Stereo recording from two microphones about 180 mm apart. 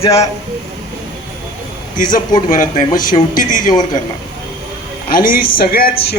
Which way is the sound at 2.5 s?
45° left (ahead or behind).